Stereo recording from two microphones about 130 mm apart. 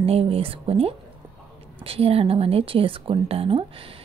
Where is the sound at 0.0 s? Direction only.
45° right (ahead or behind).